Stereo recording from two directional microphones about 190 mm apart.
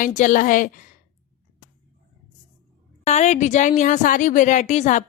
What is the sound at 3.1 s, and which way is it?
A woman's voice, 40° left (ahead or behind).